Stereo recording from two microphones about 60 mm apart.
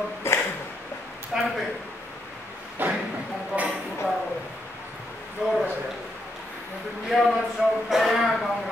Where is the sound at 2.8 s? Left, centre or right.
Right.